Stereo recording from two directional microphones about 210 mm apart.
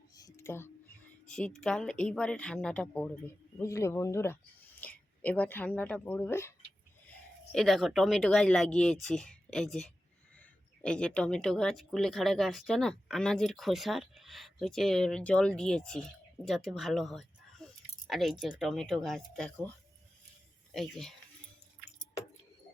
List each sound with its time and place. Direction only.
0.2 s a sound: 15° left (ahead or behind)
1.3 s speech: 5° left (ahead or behind)
7.5 s speech: centre (ahead or behind)
20.7 s speech: centre (ahead or behind)